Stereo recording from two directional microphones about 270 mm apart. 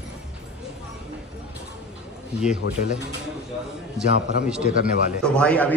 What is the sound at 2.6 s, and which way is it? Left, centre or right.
Speech, left.